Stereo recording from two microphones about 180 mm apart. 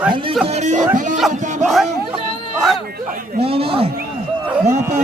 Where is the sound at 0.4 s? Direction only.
40° right (ahead or behind).